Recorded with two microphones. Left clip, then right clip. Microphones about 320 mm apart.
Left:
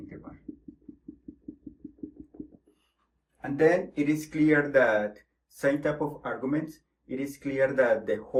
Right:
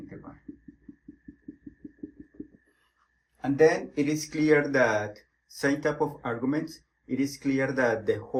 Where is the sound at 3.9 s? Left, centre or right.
Right.